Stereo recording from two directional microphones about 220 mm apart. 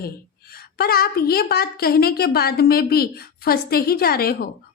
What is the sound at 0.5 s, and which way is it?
A woman's voice, 45° left (ahead or behind).